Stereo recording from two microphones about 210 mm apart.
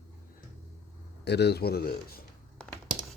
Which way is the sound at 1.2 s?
50° left (ahead or behind).